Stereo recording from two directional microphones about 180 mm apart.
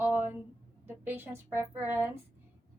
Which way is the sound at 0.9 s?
10° right (ahead or behind).